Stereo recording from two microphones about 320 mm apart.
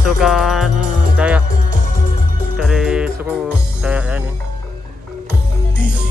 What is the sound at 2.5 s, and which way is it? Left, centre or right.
Music, centre.